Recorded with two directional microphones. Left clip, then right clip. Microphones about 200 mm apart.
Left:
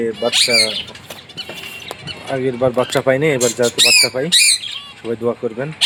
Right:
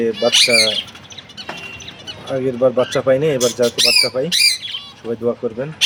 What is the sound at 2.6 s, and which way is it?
Speech, 5° left (ahead or behind).